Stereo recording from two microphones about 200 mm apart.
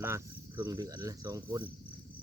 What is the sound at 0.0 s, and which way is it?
Speech, 10° right (ahead or behind).